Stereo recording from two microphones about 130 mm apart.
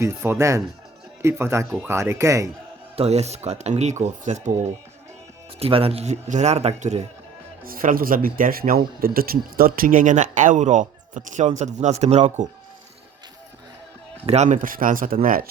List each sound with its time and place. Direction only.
0.0 s speech: 20° right (ahead or behind)
2.9 s speech: 55° right (ahead or behind)
5.5 s speech: 45° right (ahead or behind)
7.6 s speech: 90° right; by 12.5 s 65° right (ahead or behind)
14.3 s speech: 65° right (ahead or behind); by 15.4 s 90° right